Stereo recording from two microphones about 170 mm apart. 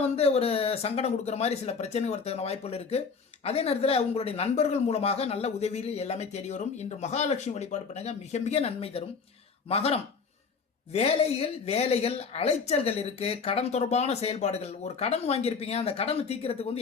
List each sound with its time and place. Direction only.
0.0 s a woman's voice: 35° left (ahead or behind)